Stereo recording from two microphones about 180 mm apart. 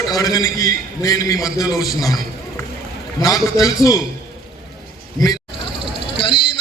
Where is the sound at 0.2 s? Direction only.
20° left (ahead or behind).